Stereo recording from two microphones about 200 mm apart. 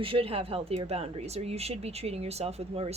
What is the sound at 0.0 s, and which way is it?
Speech, 25° right (ahead or behind).